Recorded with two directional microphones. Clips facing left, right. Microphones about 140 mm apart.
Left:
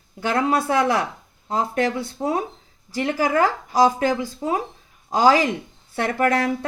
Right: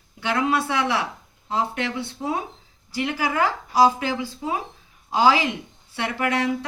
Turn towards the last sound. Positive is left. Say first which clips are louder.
# left 3 dB
turn(degrees=45)  # may be behind; listen again after turning